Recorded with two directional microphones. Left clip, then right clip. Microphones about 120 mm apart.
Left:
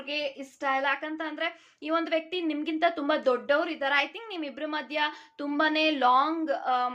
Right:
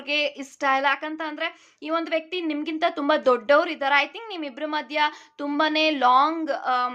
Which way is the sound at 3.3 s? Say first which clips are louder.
Right 7 dB; 50° right (ahead or behind).